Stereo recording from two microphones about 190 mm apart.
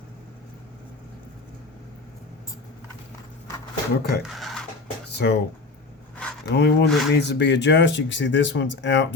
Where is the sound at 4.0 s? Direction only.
55° left (ahead or behind).